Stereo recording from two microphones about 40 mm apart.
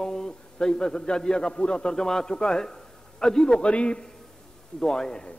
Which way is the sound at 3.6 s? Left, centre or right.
Left.